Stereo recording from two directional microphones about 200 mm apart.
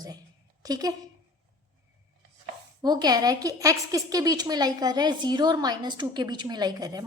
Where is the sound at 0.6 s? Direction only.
20° right (ahead or behind).